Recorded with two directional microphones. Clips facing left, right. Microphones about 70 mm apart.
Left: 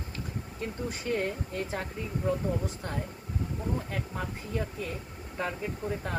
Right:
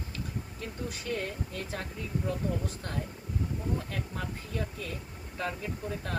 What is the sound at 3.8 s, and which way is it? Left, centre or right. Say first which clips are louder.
Speech: left 2 dB; centre.